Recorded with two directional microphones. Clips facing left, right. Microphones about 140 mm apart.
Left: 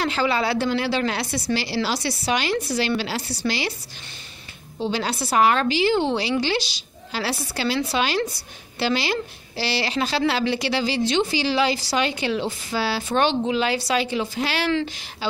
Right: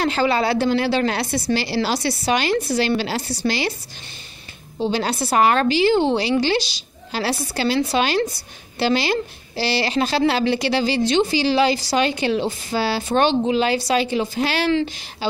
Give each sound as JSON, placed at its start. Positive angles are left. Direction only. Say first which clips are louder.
{"t": 0.0, "sound": "a woman's voice", "louder": "right 3 dB", "side_deg": -45}
{"t": 4.9, "sound": "a woman's voice", "louder": "right 2 dB", "side_deg": -50}
{"t": 14.7, "sound": "speech", "louder": "right 3 dB", "side_deg": -25}